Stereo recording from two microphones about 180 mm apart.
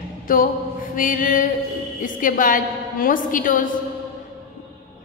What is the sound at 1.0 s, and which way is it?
A man's voice, 50° left (ahead or behind).